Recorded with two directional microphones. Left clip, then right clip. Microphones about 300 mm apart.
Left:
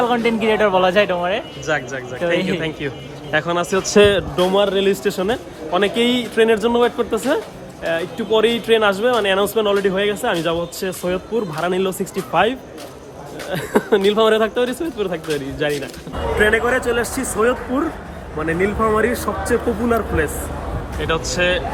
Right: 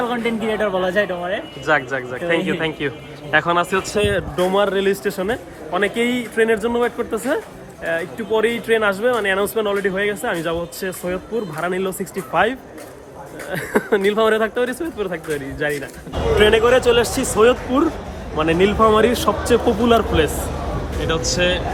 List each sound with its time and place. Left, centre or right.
0.0 s speech: centre